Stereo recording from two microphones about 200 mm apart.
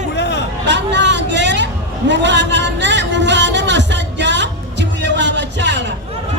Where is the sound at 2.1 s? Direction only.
60° right (ahead or behind).